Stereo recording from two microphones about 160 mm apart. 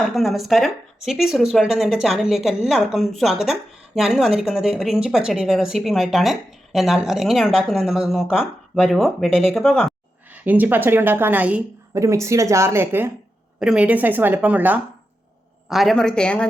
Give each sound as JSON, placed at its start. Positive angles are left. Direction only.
{"t": 0.1, "sound": "speech", "side_deg": 0}
{"t": 15.7, "sound": "speech", "side_deg": 0}